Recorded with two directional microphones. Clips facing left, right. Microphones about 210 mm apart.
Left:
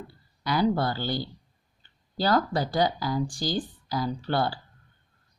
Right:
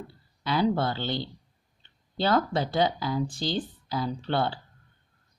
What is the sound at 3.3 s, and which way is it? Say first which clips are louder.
Speech: even; 25° right (ahead or behind).